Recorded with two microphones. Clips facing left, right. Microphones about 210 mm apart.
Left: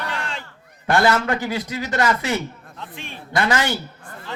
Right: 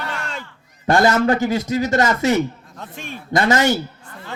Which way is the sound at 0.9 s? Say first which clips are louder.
Right 3 dB; 40° right (ahead or behind).